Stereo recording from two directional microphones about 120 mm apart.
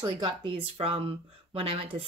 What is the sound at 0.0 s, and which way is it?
Speech, 40° right (ahead or behind).